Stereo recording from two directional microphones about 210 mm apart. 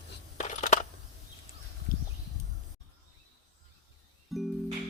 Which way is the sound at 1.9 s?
40° left (ahead or behind).